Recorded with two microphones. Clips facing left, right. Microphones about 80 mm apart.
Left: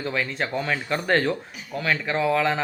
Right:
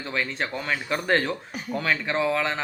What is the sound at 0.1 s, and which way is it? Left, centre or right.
Speech, centre.